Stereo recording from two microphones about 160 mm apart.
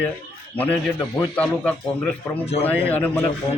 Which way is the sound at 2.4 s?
40° left (ahead or behind).